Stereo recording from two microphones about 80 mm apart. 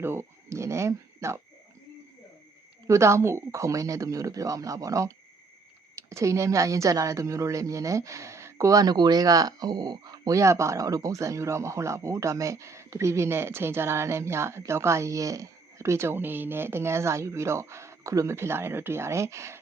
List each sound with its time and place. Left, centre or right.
0.0 s speech: right
2.8 s speech: right